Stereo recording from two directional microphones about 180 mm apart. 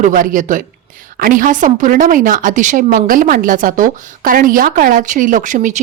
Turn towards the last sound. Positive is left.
turn(degrees=-45)  # may be behind; listen again after turning